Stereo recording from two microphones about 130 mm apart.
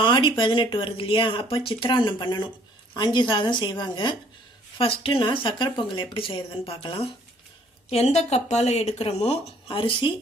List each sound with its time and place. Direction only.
0.0 s speech: 40° left (ahead or behind)
7.9 s speech: 55° left (ahead or behind)
9.6 s speech: 40° left (ahead or behind)